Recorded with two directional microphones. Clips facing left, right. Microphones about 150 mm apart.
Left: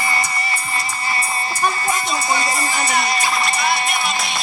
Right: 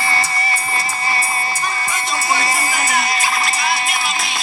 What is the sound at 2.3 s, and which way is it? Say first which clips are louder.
Music: right 2 dB; 25° right (ahead or behind).